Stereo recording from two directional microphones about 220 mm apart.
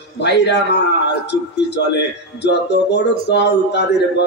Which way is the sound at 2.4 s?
50° left (ahead or behind).